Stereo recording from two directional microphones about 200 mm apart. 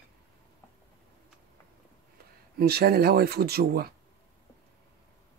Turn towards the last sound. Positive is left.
turn(degrees=-50)  # may be behind; listen again after turning